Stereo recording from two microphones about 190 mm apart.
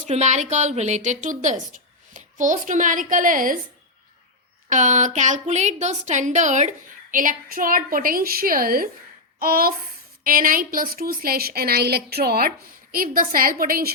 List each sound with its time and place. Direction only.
0.0 s a woman's voice: 40° right (ahead or behind)
4.7 s a woman's voice: 40° right (ahead or behind)